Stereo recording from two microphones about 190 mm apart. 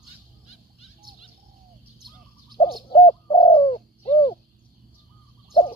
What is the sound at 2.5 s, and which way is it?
Bird, 25° left (ahead or behind).